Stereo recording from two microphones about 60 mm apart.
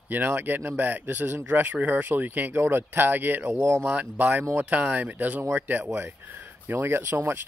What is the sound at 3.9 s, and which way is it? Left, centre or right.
Speech, right.